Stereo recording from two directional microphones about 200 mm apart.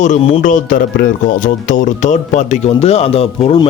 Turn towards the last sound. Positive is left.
turn(degrees=30)  # may be behind; listen again after turning